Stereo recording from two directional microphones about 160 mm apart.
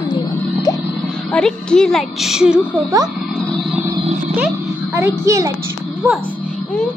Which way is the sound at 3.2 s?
Centre (ahead or behind).